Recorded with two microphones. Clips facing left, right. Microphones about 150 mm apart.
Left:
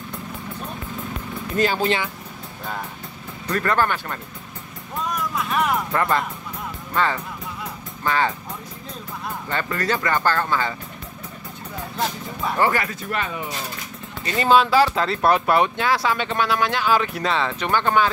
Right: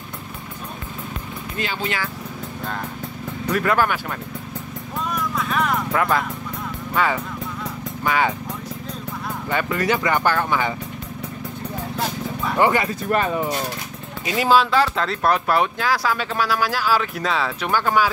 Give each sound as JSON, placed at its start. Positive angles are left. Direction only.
{"t": 1.6, "sound": "speech", "side_deg": 40}
{"t": 3.5, "sound": "speech", "side_deg": -5}
{"t": 5.3, "sound": "speech", "side_deg": 5}
{"t": 9.5, "sound": "speech", "side_deg": -10}
{"t": 12.5, "sound": "speech", "side_deg": -20}
{"t": 13.1, "sound": "speech", "side_deg": -45}
{"t": 14.2, "sound": "speech", "side_deg": -5}